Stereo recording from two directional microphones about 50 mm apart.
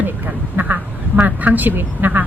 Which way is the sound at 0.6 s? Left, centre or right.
Right.